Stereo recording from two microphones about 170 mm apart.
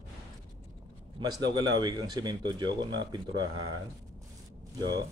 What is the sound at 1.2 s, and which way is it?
Speech, 25° right (ahead or behind).